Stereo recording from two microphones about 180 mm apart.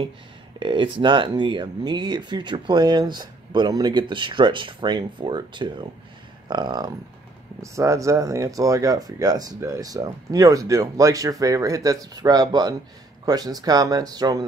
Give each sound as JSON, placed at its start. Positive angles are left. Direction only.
{"t": 0.6, "sound": "speech", "side_deg": -30}